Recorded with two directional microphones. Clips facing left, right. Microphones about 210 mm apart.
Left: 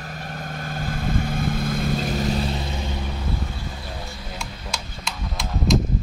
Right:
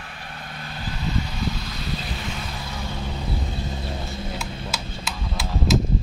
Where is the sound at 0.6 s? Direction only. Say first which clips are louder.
Left 4 dB; 50° left (ahead or behind); by 2.9 s 25° left (ahead or behind).